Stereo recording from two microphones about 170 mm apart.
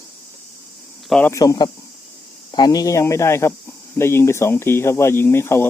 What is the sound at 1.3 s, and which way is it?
Speech, 20° left (ahead or behind).